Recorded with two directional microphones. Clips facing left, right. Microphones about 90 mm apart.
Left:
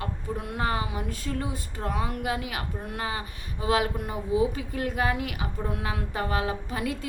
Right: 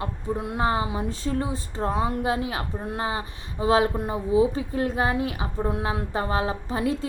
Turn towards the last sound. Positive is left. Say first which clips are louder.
# right 4 dB
turn(degrees=-30)  # may be behind; listen again after turning